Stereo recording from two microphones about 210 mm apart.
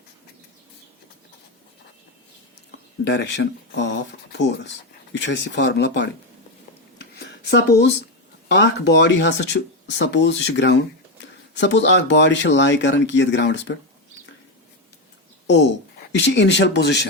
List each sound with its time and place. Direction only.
3.1 s speech: 55° left (ahead or behind)
7.2 s a sound: 50° left (ahead or behind)
8.4 s speech: 55° left (ahead or behind)
16.2 s speech: 55° left (ahead or behind)